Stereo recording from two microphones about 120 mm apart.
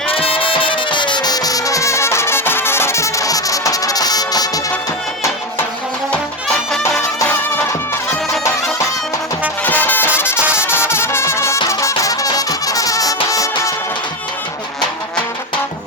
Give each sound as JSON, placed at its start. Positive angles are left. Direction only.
{"t": 0.1, "sound": "music", "side_deg": 50}
{"t": 7.3, "sound": "music", "side_deg": 20}
{"t": 9.6, "sound": "music", "side_deg": 15}
{"t": 10.2, "sound": "brass instrument", "side_deg": 20}
{"t": 10.6, "sound": "music", "side_deg": 20}